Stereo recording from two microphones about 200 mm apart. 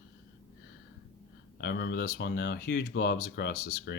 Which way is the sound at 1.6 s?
55° left (ahead or behind).